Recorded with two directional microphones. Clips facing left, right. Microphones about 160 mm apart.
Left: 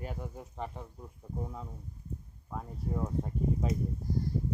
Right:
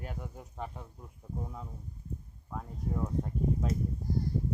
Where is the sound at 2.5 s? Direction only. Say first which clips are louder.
Even; 5° left (ahead or behind).